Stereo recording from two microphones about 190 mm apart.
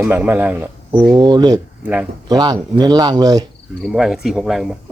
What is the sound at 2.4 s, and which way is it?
Speech, 20° right (ahead or behind).